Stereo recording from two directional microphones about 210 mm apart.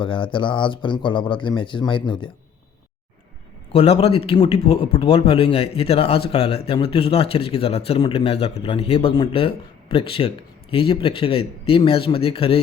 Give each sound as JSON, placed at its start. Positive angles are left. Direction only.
{"t": 0.0, "sound": "speech", "side_deg": 25}
{"t": 3.7, "sound": "speech", "side_deg": 30}